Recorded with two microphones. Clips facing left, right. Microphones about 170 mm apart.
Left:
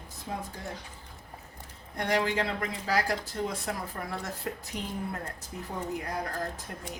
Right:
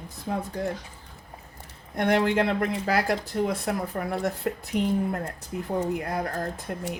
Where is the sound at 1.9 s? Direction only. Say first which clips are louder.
Right 6 dB; 60° right (ahead or behind).